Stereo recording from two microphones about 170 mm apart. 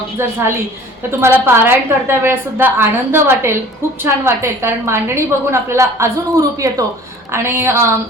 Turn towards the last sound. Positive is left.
turn(degrees=-15)  # may be behind; listen again after turning